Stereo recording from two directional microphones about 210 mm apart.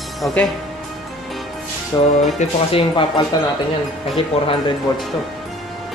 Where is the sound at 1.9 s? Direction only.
20° left (ahead or behind).